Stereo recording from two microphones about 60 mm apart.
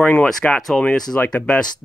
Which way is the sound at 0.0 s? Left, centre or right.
Centre.